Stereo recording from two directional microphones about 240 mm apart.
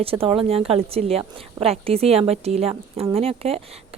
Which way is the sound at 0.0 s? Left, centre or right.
Right.